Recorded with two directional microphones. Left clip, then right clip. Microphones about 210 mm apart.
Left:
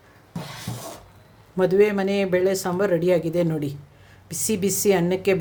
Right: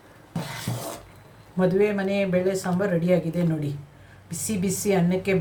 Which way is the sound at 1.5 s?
50° left (ahead or behind).